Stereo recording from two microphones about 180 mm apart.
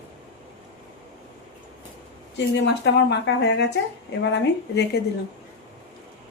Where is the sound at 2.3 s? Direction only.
75° left (ahead or behind).